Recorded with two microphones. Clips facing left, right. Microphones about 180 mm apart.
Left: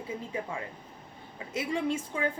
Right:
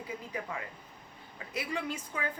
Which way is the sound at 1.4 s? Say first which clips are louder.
Left 5 dB; 25° left (ahead or behind).